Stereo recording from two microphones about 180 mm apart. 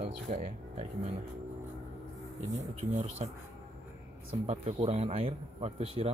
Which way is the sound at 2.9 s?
40° right (ahead or behind).